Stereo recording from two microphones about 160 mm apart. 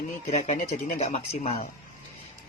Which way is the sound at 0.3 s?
45° left (ahead or behind).